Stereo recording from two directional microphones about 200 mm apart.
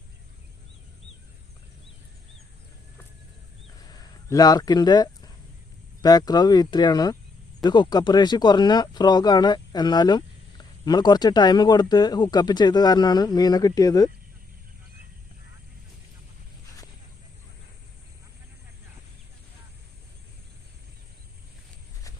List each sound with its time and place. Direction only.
4.3 s speech: 20° left (ahead or behind)